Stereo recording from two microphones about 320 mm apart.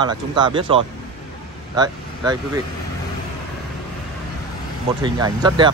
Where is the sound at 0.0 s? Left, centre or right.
Centre.